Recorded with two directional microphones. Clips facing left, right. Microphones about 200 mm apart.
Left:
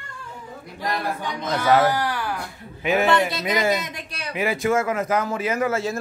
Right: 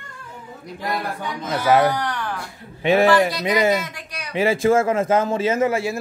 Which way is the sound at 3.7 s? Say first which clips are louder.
Right 3 dB; 25° left (ahead or behind).